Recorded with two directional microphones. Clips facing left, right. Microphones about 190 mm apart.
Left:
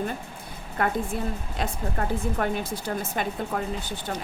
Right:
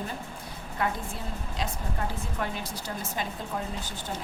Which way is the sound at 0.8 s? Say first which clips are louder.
Left 5 dB; 55° left (ahead or behind).